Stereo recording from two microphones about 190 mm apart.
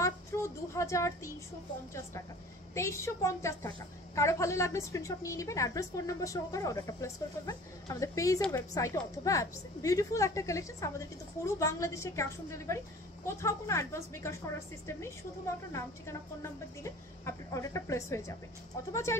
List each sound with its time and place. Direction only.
0.0 s child singing: 15° left (ahead or behind)
2.7 s a woman's voice: 15° left (ahead or behind)